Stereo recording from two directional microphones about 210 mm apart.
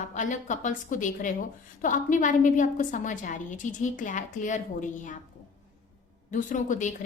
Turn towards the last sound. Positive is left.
turn(degrees=35)  # may be behind; listen again after turning